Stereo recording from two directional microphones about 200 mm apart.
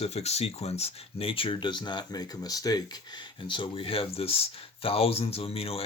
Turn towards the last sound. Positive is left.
turn(degrees=30)  # may be behind; listen again after turning